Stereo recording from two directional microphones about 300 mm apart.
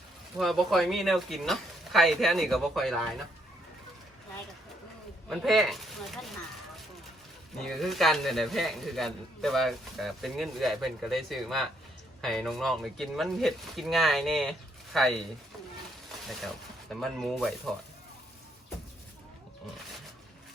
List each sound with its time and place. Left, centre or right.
0.3 s a man's voice: centre
5.3 s a man's voice: centre
7.6 s a man's voice: centre
16.9 s a man's voice: centre